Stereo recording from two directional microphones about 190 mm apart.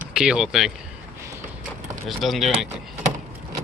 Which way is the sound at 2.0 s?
Centre (ahead or behind).